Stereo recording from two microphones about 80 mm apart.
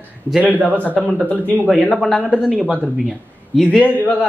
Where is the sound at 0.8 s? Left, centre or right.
Centre.